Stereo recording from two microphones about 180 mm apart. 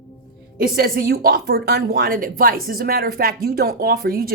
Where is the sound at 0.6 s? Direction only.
55° right (ahead or behind).